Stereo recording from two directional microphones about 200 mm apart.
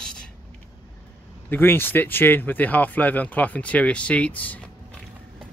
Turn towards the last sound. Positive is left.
turn(degrees=5)  # may be behind; listen again after turning